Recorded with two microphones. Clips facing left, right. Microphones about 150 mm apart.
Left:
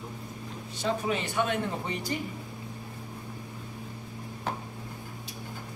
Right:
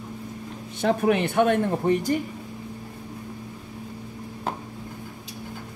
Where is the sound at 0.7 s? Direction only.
60° right (ahead or behind).